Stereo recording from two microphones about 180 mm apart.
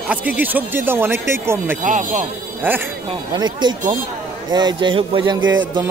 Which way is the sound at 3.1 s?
25° right (ahead or behind).